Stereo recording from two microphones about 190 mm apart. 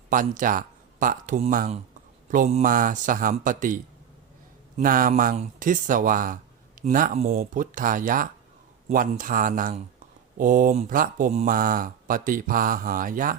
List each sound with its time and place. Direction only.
0.1 s speech: 45° right (ahead or behind)
4.8 s speech: 45° right (ahead or behind)